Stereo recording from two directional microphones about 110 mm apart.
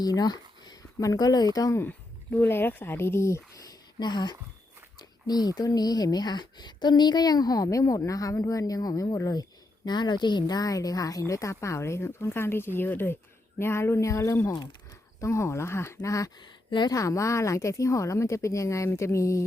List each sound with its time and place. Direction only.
0.0 s speech: 35° left (ahead or behind)
1.8 s a woman's voice: 20° left (ahead or behind)
14.4 s speech: 40° left (ahead or behind)
15.2 s a woman's voice: 25° left (ahead or behind)
16.4 s speech: 45° left (ahead or behind)
16.9 s a woman's voice: 30° left (ahead or behind)